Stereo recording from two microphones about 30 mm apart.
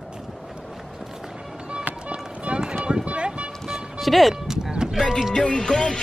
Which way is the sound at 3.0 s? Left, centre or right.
Right.